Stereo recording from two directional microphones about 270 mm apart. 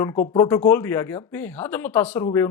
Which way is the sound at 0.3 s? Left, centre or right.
Centre.